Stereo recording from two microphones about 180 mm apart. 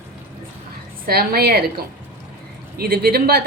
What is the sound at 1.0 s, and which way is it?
A woman's voice, 55° right (ahead or behind).